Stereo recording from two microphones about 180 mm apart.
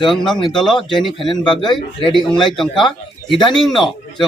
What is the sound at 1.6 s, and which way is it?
Speech, 25° left (ahead or behind).